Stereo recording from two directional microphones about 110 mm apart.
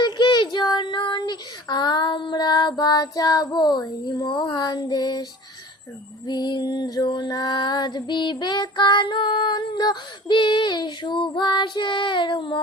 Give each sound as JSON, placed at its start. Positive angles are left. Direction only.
{"t": 0.0, "sound": "child singing", "side_deg": 45}
{"t": 6.2, "sound": "music", "side_deg": 40}